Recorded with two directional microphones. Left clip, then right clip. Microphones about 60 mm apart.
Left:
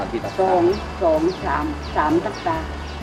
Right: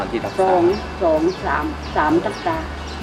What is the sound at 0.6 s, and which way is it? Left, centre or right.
Speech, left.